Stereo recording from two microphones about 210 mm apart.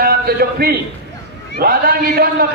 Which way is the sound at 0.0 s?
45° right (ahead or behind).